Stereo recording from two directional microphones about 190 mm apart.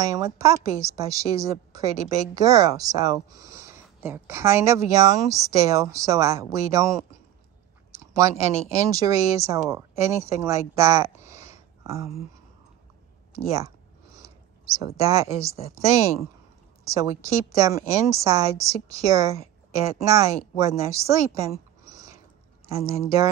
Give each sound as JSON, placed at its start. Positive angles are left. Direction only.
{"t": 0.0, "sound": "a woman's voice", "side_deg": -15}
{"t": 13.5, "sound": "a sound", "side_deg": -15}
{"t": 15.0, "sound": "a woman's voice", "side_deg": -15}